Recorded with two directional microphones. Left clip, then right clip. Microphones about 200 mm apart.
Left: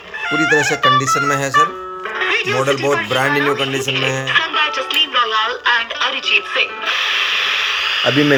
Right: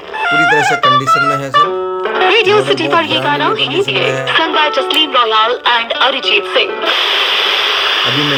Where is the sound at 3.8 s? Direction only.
15° right (ahead or behind).